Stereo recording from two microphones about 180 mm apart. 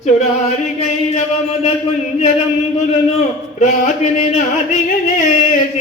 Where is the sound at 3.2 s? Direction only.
40° left (ahead or behind).